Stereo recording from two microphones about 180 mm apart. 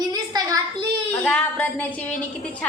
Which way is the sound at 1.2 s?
10° left (ahead or behind).